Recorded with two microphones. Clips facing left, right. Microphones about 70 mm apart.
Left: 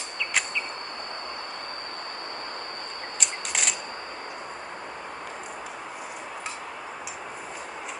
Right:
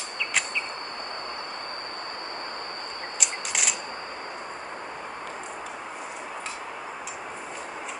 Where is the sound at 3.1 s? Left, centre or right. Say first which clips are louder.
Even; centre.